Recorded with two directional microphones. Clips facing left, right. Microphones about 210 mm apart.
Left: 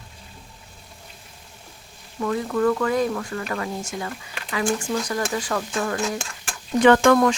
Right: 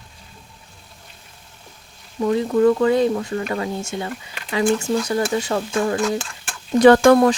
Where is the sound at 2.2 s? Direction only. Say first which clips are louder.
Right 5 dB; 25° right (ahead or behind).